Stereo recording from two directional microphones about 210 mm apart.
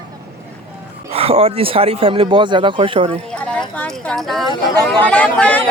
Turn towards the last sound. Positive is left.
turn(degrees=5)  # may be behind; listen again after turning